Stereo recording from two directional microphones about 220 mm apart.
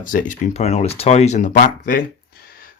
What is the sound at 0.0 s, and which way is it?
Speech, 35° left (ahead or behind).